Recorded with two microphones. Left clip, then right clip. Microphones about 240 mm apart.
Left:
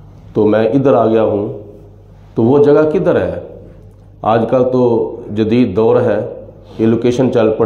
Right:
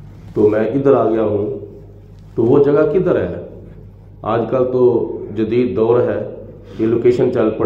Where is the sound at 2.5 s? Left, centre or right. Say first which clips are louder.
Left 3 dB; left.